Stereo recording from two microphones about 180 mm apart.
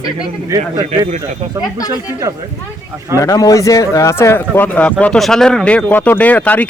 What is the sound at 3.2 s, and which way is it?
A man's voice, 20° left (ahead or behind).